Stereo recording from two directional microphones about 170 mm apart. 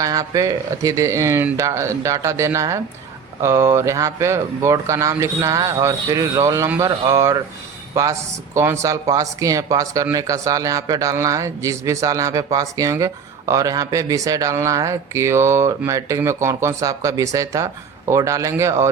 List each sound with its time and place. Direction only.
0.0 s speech: 20° right (ahead or behind)